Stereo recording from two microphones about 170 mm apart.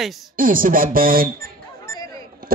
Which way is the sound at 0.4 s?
55° right (ahead or behind).